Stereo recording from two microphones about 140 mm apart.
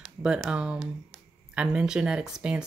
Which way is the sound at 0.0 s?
5° right (ahead or behind).